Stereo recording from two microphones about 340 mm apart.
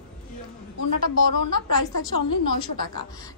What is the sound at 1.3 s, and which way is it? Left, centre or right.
Speech, left.